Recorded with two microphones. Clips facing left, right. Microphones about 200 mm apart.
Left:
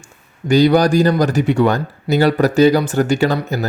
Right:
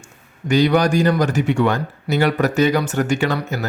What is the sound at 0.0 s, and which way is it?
Speech, 35° left (ahead or behind).